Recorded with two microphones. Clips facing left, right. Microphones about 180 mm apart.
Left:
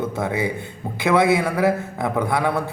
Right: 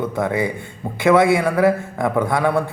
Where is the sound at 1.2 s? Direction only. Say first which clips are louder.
Right 3 dB; 20° left (ahead or behind).